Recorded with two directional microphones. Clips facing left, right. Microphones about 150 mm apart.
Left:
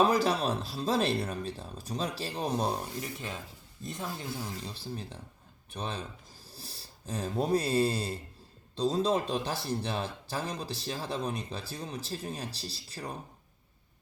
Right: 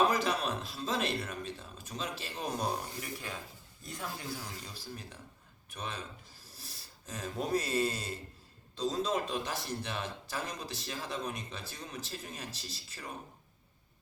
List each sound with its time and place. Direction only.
0.0 s speech: 30° left (ahead or behind)